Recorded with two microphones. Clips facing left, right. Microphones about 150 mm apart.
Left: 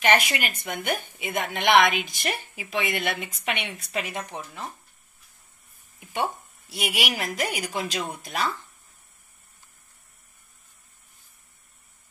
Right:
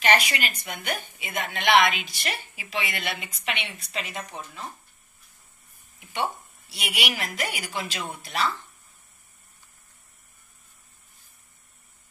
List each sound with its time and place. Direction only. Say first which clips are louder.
0.3 s a woman's voice: left 2 dB; 55° left (ahead or behind)
3.9 s a woman's voice: left 3 dB; 60° left (ahead or behind)
6.1 s a woman's voice: left 1 dB; 45° left (ahead or behind)